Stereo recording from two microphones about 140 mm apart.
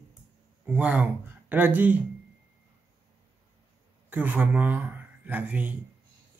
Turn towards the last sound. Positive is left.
turn(degrees=-10)  # may be behind; listen again after turning